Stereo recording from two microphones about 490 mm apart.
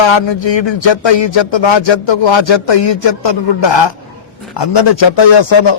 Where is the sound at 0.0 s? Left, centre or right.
Left.